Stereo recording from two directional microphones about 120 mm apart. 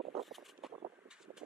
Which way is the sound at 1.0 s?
5° right (ahead or behind).